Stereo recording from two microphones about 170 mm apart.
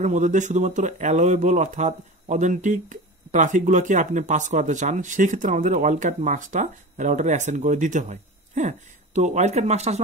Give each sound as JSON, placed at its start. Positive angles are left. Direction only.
{"t": 0.0, "sound": "speech", "side_deg": -45}